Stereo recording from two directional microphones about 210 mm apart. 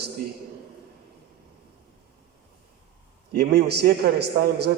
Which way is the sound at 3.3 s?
50° right (ahead or behind).